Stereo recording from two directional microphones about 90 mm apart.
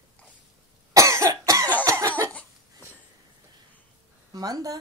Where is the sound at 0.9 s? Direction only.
35° right (ahead or behind).